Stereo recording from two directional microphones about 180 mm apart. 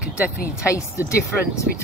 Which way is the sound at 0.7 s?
15° left (ahead or behind).